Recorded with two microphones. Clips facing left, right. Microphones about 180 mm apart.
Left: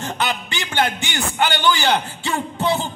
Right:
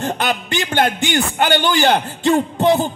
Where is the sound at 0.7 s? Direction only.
55° right (ahead or behind).